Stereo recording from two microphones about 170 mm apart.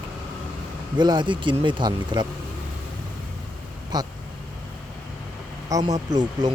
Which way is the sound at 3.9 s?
25° right (ahead or behind).